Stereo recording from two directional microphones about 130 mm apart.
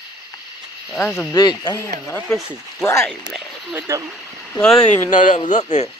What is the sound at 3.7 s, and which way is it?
Speech, 20° right (ahead or behind).